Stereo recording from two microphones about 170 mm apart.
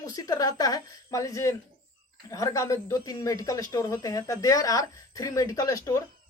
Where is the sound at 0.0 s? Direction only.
20° left (ahead or behind).